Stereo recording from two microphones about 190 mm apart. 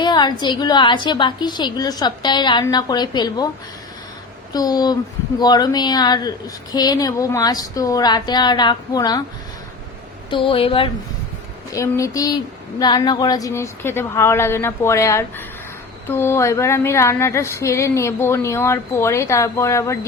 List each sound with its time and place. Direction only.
0.0 s a woman's voice: 25° left (ahead or behind)
4.5 s a woman's voice: 20° left (ahead or behind)
10.2 s a woman's voice: 25° left (ahead or behind)
11.7 s speech: 15° left (ahead or behind)